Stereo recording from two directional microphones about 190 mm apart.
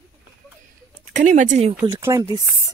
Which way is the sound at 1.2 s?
40° right (ahead or behind).